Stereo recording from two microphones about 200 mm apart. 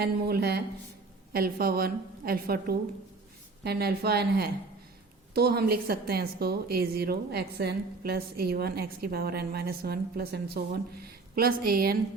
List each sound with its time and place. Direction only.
0.0 s a woman's voice: 50° right (ahead or behind)